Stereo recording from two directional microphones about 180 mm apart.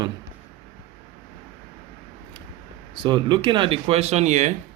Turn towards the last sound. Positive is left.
turn(degrees=-40)  # may be behind; listen again after turning